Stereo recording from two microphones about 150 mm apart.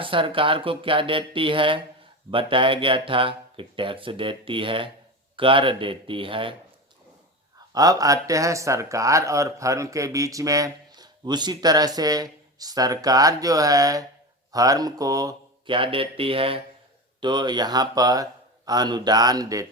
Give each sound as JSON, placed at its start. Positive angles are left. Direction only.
{"t": 0.0, "sound": "speech", "side_deg": -35}
{"t": 7.7, "sound": "speech", "side_deg": -25}